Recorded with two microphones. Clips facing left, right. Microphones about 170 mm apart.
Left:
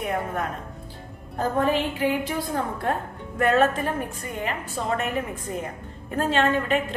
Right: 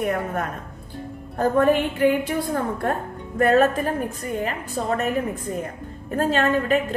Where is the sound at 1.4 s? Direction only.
55° right (ahead or behind).